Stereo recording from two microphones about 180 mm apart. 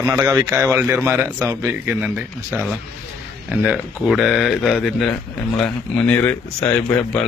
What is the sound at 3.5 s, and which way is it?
Speech, 5° right (ahead or behind).